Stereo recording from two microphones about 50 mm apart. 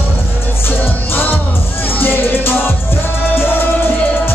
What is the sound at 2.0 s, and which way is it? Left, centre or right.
Music, left.